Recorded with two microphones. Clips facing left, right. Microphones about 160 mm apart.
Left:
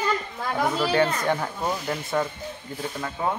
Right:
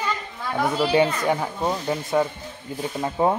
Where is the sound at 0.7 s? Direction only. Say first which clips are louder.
Right 4 dB; 10° right (ahead or behind).